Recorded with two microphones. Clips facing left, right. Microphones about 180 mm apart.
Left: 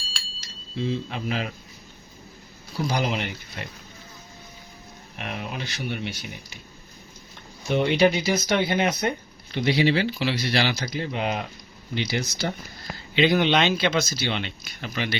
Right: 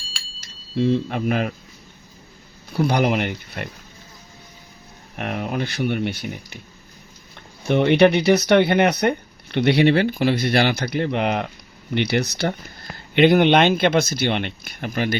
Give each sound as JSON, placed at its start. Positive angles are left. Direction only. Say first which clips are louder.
{"t": 0.8, "sound": "a man's voice", "louder": "right 8 dB", "side_deg": -55}
{"t": 2.7, "sound": "speech", "louder": "right 7 dB", "side_deg": -60}
{"t": 5.1, "sound": "speech", "louder": "right 8 dB", "side_deg": -55}
{"t": 7.6, "sound": "speech", "louder": "right 5 dB", "side_deg": -60}